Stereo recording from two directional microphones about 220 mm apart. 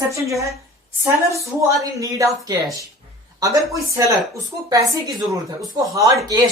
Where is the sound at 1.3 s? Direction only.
15° right (ahead or behind).